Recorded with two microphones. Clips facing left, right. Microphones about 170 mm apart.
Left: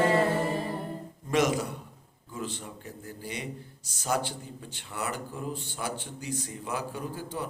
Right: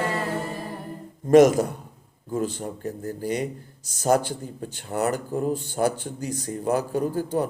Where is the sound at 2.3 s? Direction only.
45° right (ahead or behind).